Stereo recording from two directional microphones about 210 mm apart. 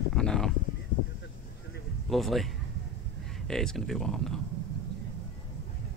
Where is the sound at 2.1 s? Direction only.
Centre (ahead or behind).